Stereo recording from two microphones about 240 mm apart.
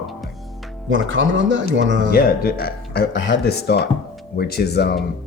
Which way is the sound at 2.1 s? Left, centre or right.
Left.